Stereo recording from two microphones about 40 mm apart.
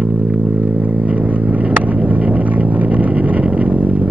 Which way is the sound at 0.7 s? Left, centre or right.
Right.